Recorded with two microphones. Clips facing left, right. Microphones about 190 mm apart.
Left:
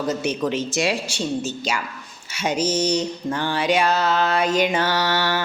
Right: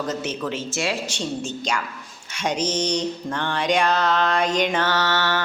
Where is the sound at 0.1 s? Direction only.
15° left (ahead or behind).